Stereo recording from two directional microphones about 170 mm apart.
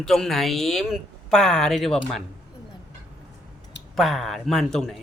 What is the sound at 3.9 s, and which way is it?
Speech, centre (ahead or behind).